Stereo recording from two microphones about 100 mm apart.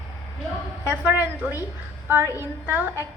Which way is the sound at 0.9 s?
15° right (ahead or behind).